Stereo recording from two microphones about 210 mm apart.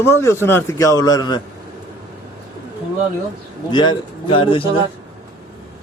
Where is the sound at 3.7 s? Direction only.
20° left (ahead or behind).